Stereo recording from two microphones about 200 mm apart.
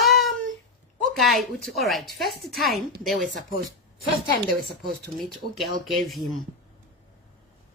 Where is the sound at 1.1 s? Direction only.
Centre (ahead or behind).